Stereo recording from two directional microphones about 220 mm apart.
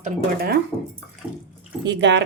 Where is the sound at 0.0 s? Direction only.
45° right (ahead or behind).